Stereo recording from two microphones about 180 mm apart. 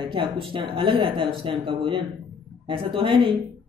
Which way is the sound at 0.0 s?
30° right (ahead or behind).